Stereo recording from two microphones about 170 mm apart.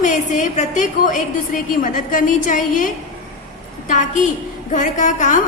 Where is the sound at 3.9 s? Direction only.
50° left (ahead or behind).